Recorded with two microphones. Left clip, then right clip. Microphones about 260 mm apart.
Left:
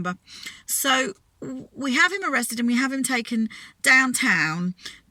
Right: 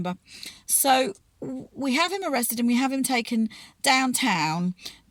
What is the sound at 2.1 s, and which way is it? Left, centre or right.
Speech, left.